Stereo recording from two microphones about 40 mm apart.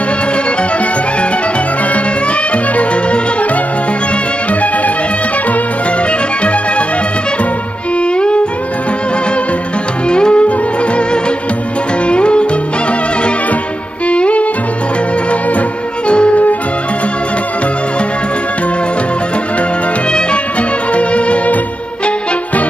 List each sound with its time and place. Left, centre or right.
2.5 s music: left
8.0 s music: left
10.0 s music: left
12.1 s music: left
14.0 s music: left
16.1 s music: left
20.1 s music: left
20.9 s violin: left